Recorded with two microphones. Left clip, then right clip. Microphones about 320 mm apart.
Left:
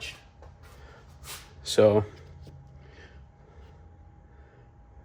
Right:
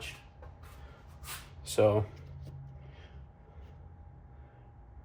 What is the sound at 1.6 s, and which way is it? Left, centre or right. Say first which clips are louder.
Speech: left 6 dB; left.